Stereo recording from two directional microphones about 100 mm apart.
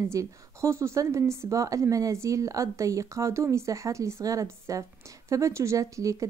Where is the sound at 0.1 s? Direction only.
30° right (ahead or behind).